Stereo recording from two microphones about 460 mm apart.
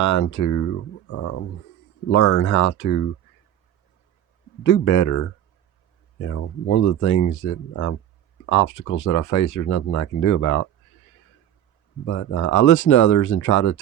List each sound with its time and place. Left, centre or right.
0.0 s speech: left
4.6 s speech: left
12.0 s speech: left